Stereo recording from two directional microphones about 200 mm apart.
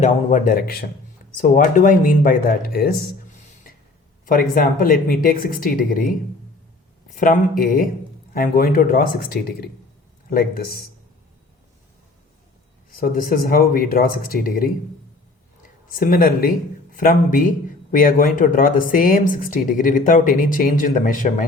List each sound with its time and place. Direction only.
0.0 s speech: 40° left (ahead or behind)
4.3 s speech: 45° left (ahead or behind)
7.2 s speech: 45° left (ahead or behind)
12.9 s speech: 45° left (ahead or behind)
15.9 s speech: 45° left (ahead or behind)